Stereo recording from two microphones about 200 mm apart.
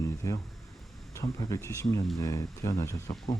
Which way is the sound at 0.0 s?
15° left (ahead or behind).